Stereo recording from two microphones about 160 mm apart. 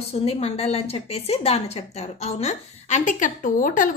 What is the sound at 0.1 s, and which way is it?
A woman's voice, 40° left (ahead or behind).